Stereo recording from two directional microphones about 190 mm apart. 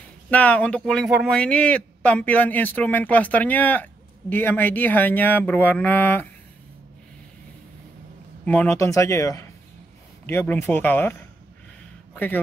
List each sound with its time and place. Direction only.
0.3 s speech: 5° left (ahead or behind)
8.5 s speech: 10° left (ahead or behind)
10.6 s a man's voice: 10° left (ahead or behind)